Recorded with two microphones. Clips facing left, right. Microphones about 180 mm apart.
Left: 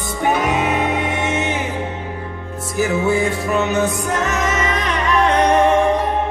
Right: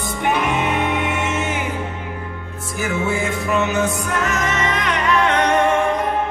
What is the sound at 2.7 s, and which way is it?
Music, 35° left (ahead or behind).